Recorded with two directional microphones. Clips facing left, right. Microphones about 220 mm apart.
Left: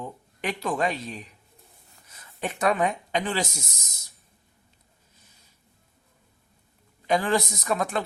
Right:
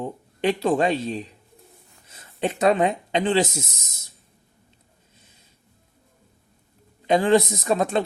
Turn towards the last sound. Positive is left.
turn(degrees=-25)  # may be behind; listen again after turning